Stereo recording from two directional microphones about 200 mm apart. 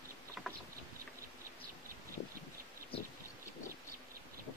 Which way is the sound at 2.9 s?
25° left (ahead or behind).